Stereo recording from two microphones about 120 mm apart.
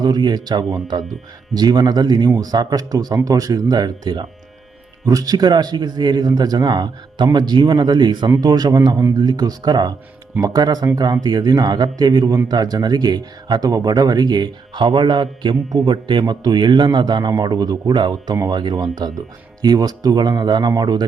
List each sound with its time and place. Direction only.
0.0 s speech: 35° right (ahead or behind)